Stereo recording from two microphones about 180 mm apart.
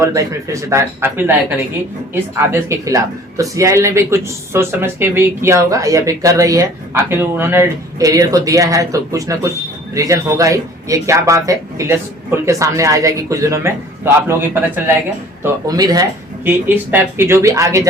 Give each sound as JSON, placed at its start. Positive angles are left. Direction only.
{"t": 0.0, "sound": "a man's voice", "side_deg": -15}
{"t": 15.4, "sound": "a man's voice", "side_deg": -20}